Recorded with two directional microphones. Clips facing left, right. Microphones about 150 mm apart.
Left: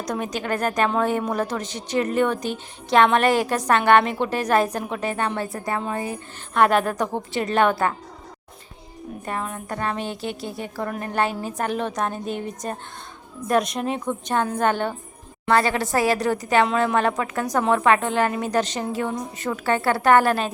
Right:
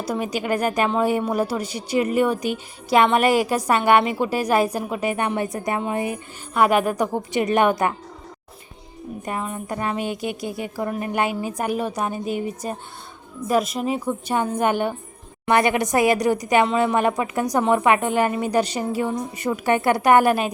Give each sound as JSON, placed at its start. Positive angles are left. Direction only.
{"t": 0.0, "sound": "a woman's voice", "side_deg": -5}
{"t": 9.2, "sound": "a woman's voice", "side_deg": -10}